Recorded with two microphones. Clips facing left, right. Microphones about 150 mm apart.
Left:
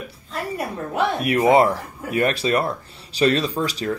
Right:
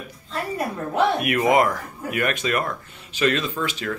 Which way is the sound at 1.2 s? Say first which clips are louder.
Left 3 dB; 30° left (ahead or behind).